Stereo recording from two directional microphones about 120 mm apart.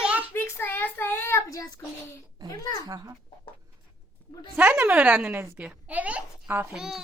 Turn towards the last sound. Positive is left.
turn(degrees=-5)  # may be behind; listen again after turning